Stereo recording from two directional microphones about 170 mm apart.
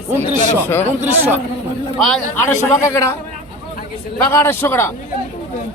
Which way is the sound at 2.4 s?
15° left (ahead or behind).